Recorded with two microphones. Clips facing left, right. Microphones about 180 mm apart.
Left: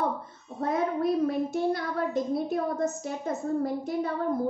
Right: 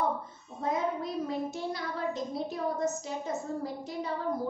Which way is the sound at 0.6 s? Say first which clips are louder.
Left 4 dB; 60° left (ahead or behind).